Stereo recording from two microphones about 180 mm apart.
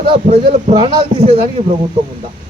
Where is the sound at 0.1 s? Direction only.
25° right (ahead or behind).